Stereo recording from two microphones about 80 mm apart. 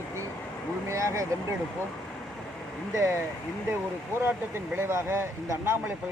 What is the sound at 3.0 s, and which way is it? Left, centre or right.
Speech, right.